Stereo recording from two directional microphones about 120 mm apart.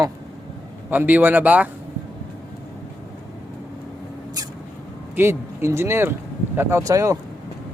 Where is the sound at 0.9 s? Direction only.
15° right (ahead or behind).